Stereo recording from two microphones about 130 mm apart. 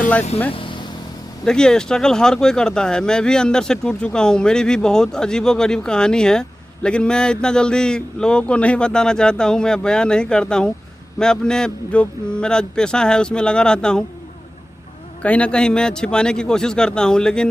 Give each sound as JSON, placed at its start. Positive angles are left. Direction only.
{"t": 0.5, "sound": "vehicle", "side_deg": 40}
{"t": 1.4, "sound": "speech", "side_deg": 5}
{"t": 15.2, "sound": "speech", "side_deg": 10}